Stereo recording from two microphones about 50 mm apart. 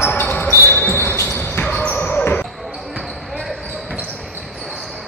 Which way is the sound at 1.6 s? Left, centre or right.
Left.